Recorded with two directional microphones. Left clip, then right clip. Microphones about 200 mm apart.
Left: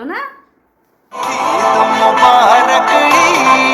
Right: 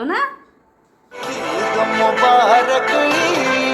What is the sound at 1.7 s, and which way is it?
Music, 35° left (ahead or behind).